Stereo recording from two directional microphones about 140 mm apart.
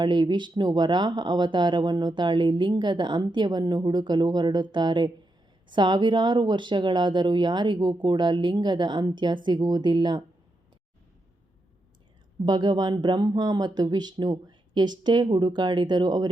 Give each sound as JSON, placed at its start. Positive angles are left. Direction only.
{"t": 0.0, "sound": "speech", "side_deg": -35}
{"t": 12.5, "sound": "speech", "side_deg": -30}